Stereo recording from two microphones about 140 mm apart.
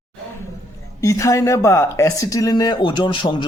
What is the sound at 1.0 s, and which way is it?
Speech, 20° left (ahead or behind).